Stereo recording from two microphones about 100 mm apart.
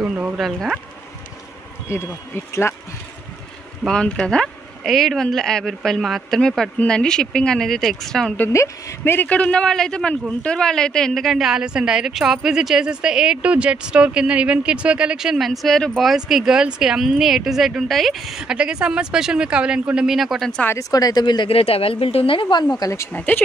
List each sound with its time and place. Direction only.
0.0 s insect: 15° right (ahead or behind)
0.4 s a woman's voice: centre (ahead or behind)
1.9 s speech: 25° left (ahead or behind)
3.8 s a woman's voice: 5° left (ahead or behind)
8.5 s a man's voice: 30° left (ahead or behind); by 20.6 s 5° left (ahead or behind)
20.9 s speech: 40° left (ahead or behind)
21.5 s a woman's voice: 75° left (ahead or behind); by 22.8 s 45° left (ahead or behind)
23.1 s a man's voice: 15° left (ahead or behind)